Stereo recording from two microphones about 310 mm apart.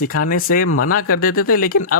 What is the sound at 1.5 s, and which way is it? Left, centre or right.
Speech, left.